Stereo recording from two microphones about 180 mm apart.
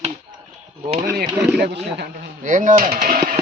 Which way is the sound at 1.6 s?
65° right (ahead or behind).